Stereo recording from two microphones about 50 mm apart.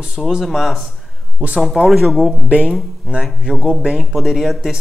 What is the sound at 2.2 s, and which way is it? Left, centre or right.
Speech, right.